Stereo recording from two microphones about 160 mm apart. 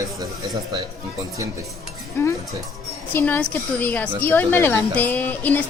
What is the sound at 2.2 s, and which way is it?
A woman's voice, 15° left (ahead or behind).